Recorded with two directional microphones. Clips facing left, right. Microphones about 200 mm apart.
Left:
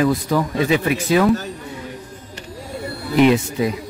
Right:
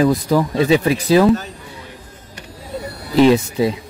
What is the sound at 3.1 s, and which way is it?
Speech, 35° right (ahead or behind).